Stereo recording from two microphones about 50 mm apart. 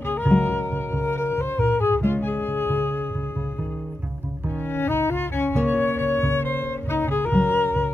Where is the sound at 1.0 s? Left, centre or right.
Left.